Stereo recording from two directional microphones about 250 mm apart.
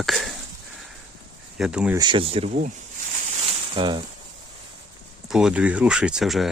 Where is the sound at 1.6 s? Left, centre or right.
Centre.